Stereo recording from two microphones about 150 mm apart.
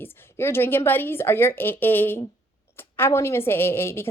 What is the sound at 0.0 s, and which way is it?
A woman's voice, 15° left (ahead or behind).